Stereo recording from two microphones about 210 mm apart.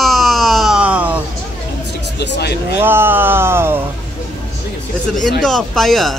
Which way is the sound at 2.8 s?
10° right (ahead or behind).